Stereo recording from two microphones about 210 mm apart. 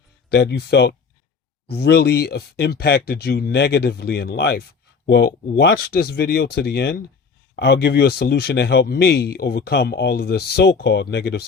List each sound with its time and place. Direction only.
0.3 s speech: 50° left (ahead or behind)